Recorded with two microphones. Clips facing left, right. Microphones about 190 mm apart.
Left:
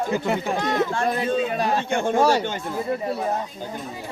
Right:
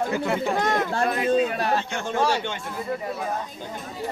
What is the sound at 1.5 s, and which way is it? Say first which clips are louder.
Speech: left 2 dB; 15° left (ahead or behind).